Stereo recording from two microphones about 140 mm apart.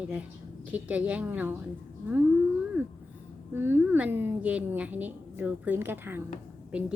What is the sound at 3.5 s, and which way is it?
A woman's voice, 15° right (ahead or behind).